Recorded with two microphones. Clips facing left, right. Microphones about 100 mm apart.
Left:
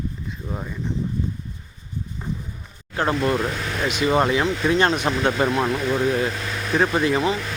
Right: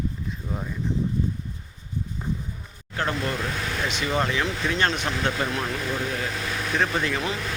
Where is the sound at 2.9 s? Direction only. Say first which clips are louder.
Left 6 dB; 25° left (ahead or behind).